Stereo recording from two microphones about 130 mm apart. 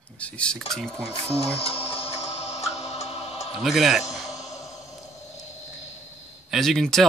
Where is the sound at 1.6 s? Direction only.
50° left (ahead or behind).